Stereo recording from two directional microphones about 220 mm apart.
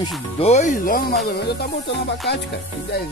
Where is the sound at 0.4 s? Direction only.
30° left (ahead or behind).